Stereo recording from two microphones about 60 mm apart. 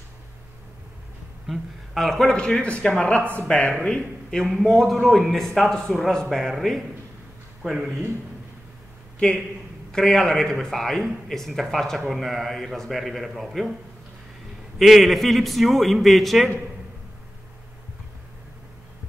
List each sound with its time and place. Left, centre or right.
1.5 s a man's voice: centre
4.6 s speech: centre
7.6 s speech: centre
9.8 s speech: centre
14.8 s speech: centre